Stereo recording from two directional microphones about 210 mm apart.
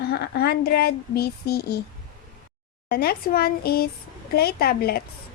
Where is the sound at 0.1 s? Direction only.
50° left (ahead or behind).